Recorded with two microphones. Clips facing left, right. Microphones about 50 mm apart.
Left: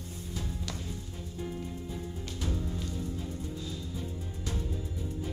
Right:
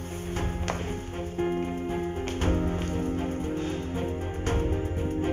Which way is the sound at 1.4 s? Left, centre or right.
Right.